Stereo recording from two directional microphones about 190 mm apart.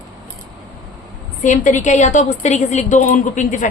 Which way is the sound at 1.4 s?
40° left (ahead or behind).